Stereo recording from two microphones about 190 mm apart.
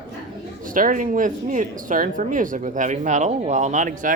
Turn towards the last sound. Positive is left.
turn(degrees=-40)  # may be behind; listen again after turning